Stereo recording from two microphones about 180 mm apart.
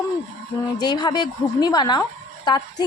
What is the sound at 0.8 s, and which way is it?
Speech, 25° left (ahead or behind).